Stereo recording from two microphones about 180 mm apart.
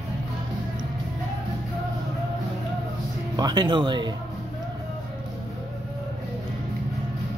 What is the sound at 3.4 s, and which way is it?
Speech, 25° right (ahead or behind).